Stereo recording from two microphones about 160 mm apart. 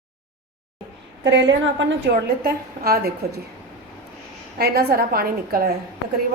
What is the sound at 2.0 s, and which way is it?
A woman's voice, 75° right (ahead or behind).